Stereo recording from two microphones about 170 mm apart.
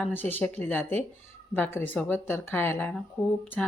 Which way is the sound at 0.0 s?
10° left (ahead or behind).